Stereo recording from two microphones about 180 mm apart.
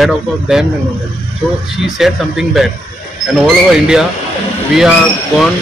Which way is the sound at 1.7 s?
Centre (ahead or behind).